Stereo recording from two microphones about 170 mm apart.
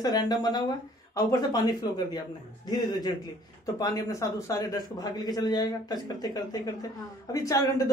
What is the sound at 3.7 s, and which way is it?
A man's voice, 20° left (ahead or behind).